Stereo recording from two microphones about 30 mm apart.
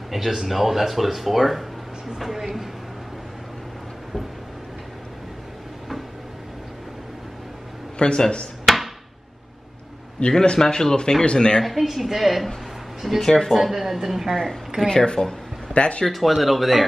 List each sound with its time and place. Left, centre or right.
0.1 s speech: centre
8.0 s speech: left
8.7 s a sound: centre
10.2 s speech: left
10.6 s speech: centre
11.6 s speech: centre
13.2 s speech: centre
13.6 s speech: centre
14.3 s speech: centre
14.9 s speech: left
15.7 s speech: left
16.1 s speech: centre